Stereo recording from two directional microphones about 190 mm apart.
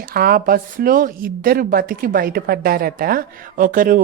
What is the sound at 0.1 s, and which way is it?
Speech, 50° right (ahead or behind).